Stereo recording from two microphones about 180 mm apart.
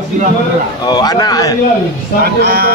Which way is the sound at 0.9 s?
20° left (ahead or behind).